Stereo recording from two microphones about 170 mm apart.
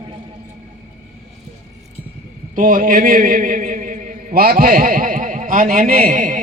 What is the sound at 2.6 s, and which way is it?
A man's voice, 55° right (ahead or behind).